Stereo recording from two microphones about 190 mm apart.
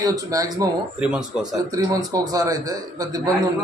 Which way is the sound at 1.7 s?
20° right (ahead or behind).